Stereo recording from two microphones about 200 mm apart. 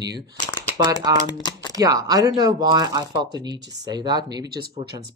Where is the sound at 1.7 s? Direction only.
20° right (ahead or behind).